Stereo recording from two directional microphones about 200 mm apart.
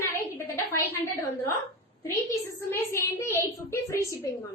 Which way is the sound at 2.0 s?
15° left (ahead or behind).